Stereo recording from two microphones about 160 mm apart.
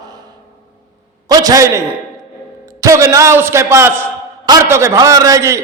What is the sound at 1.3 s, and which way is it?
Speech, 25° right (ahead or behind).